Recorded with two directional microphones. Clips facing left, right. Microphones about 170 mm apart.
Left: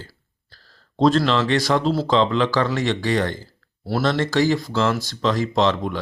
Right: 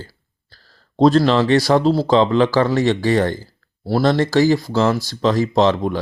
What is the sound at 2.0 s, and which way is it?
Speech, 40° right (ahead or behind).